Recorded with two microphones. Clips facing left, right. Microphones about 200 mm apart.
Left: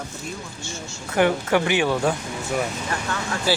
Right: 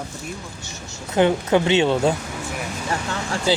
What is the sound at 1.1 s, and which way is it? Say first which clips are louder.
Speech: right 2 dB; 20° right (ahead or behind).